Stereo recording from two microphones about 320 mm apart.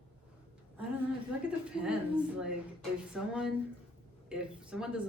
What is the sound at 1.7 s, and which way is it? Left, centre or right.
Speech, centre.